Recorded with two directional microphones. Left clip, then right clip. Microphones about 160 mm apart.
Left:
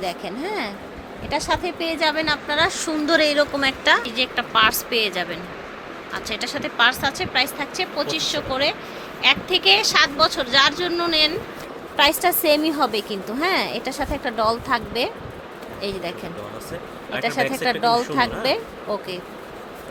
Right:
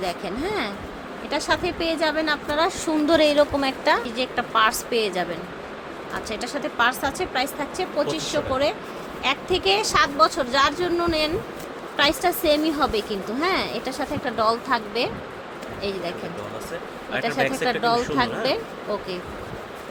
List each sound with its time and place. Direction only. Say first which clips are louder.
0.0 s a woman's voice: even; 5° left (ahead or behind)
11.9 s a woman's voice: left 3 dB; 15° left (ahead or behind)